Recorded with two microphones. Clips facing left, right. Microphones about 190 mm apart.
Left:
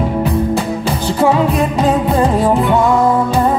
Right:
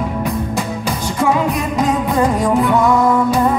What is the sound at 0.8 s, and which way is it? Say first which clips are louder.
Music: left 3 dB; 30° left (ahead or behind).